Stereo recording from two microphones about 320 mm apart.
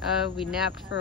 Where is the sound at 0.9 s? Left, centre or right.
Left.